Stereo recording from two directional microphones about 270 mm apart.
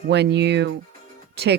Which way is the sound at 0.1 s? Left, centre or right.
Right.